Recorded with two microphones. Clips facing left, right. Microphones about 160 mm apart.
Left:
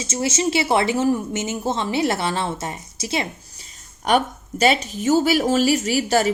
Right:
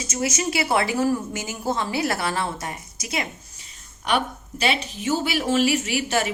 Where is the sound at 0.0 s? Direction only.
30° left (ahead or behind).